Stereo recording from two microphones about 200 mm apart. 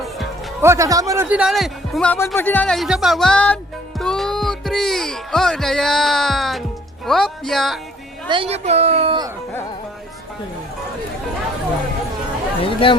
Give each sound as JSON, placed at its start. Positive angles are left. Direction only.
{"t": 0.6, "sound": "a man's voice", "side_deg": -15}
{"t": 8.3, "sound": "a woman's voice", "side_deg": -30}
{"t": 12.6, "sound": "speech", "side_deg": 25}